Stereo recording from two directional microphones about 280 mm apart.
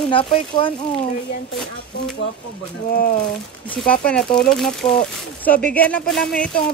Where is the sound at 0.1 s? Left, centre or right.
Centre.